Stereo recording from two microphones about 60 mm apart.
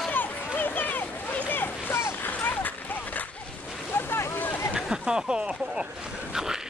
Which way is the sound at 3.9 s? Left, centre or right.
Left.